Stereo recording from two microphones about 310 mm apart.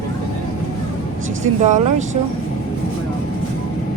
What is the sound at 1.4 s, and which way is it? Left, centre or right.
Speech, right.